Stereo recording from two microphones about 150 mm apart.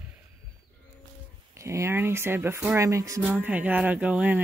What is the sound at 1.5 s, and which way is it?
Speech, 20° right (ahead or behind).